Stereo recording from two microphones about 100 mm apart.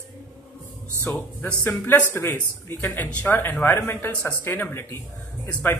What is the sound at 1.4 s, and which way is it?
Speech, 20° left (ahead or behind).